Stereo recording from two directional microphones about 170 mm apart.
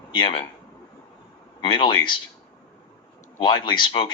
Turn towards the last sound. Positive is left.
turn(degrees=30)  # may be behind; listen again after turning